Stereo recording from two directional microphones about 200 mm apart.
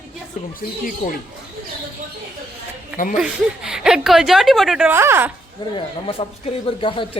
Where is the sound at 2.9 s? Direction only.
40° left (ahead or behind).